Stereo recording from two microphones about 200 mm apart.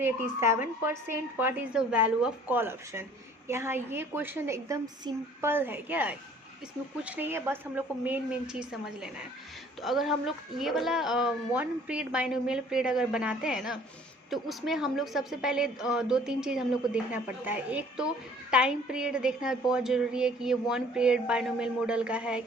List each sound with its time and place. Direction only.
0.0 s a woman's voice: 10° right (ahead or behind)